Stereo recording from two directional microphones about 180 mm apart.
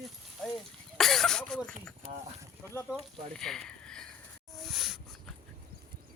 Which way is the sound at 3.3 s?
5° left (ahead or behind).